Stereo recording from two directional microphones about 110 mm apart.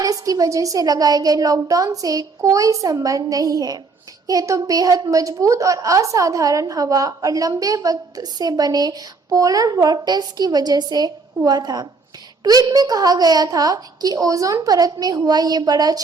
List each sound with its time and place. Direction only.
0.0 s a woman's voice: 35° right (ahead or behind)